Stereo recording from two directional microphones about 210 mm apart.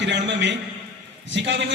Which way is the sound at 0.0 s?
55° right (ahead or behind).